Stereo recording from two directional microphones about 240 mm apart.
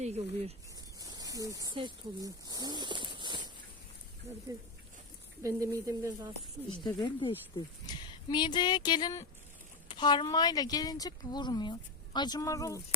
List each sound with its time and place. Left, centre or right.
0.0 s speech: right
0.9 s speech: centre
5.4 s speech: centre
6.7 s speech: centre